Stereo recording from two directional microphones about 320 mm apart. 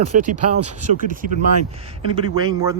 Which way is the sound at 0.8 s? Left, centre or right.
Right.